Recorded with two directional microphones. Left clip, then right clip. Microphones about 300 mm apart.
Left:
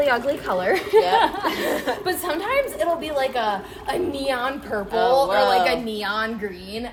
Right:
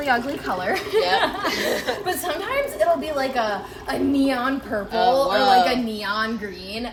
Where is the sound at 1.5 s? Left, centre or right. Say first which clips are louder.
Even; centre.